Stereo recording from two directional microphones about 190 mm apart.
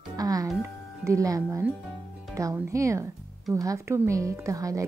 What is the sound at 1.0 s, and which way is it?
Speech, 15° right (ahead or behind).